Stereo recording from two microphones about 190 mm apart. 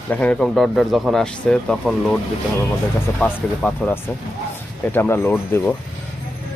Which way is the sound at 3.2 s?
5° left (ahead or behind).